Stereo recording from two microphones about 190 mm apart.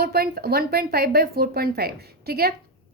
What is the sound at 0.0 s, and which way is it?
A woman's voice, 55° right (ahead or behind).